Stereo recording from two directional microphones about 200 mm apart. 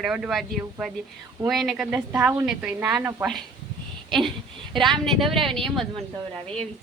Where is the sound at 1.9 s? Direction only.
10° right (ahead or behind).